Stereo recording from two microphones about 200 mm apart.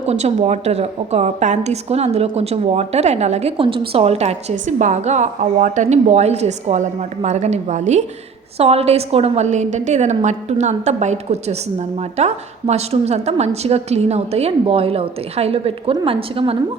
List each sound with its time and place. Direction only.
0.0 s a woman's voice: 30° right (ahead or behind)